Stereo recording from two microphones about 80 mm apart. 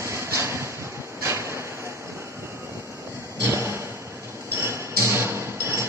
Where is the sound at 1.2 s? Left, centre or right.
Right.